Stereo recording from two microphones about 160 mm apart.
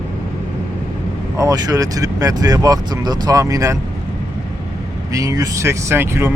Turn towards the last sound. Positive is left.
turn(degrees=-15)  # may be behind; listen again after turning